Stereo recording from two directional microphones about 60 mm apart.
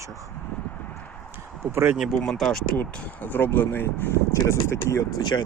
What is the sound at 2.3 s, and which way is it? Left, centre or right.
Speech, centre.